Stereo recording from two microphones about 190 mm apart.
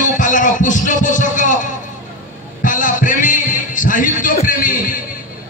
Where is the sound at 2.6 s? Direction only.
45° left (ahead or behind).